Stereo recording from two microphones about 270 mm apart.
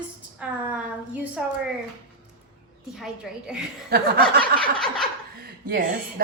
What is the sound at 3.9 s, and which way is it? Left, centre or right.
Speech, right.